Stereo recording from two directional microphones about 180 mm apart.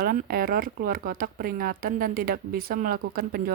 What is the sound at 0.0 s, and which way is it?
Speech, 55° right (ahead or behind).